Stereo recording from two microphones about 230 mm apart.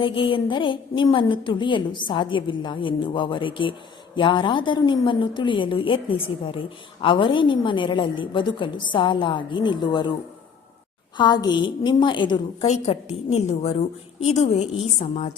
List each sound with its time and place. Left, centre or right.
0.0 s a woman's voice: left
11.2 s a woman's voice: centre